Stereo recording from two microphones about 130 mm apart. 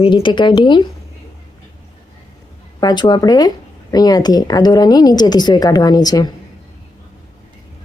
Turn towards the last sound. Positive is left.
turn(degrees=30)  # may be behind; listen again after turning